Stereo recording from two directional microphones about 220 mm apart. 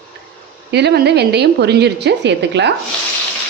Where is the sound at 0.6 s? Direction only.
50° right (ahead or behind).